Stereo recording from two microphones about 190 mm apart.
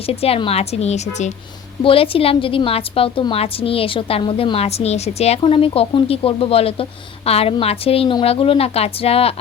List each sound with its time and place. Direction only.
0.0 s a woman's voice: 30° left (ahead or behind)